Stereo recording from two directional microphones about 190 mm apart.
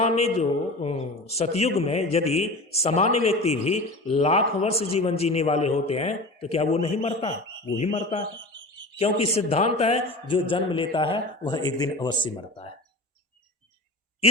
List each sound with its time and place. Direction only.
0.0 s a man's voice: 35° left (ahead or behind)